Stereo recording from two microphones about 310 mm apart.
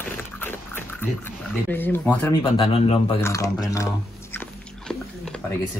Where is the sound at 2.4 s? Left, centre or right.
Centre.